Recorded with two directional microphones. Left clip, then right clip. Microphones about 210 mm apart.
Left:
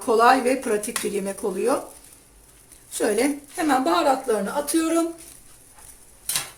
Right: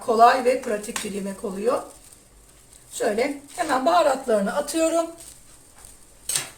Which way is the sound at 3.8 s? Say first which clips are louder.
Right 1 dB; 25° left (ahead or behind).